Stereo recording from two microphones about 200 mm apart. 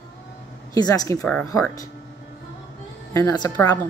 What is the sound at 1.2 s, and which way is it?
Speech, 5° left (ahead or behind).